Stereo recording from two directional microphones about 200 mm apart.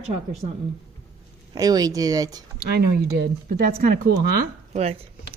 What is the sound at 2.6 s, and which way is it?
Speech, 50° right (ahead or behind).